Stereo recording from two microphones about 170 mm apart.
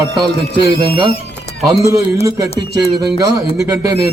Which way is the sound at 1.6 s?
20° right (ahead or behind).